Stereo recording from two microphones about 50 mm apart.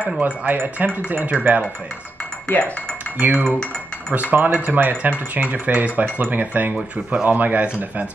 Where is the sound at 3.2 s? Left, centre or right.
Right.